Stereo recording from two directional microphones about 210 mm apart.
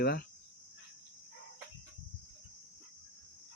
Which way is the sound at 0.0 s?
50° left (ahead or behind).